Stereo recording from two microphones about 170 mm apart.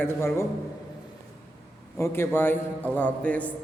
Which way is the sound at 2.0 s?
15° left (ahead or behind).